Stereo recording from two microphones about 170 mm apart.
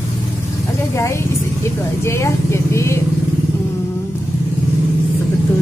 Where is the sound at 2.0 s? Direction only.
15° left (ahead or behind).